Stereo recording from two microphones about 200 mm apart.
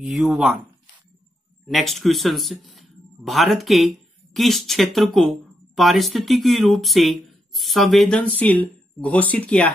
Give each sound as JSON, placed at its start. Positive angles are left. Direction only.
{"t": 0.0, "sound": "speech", "side_deg": 0}
{"t": 1.7, "sound": "speech", "side_deg": 0}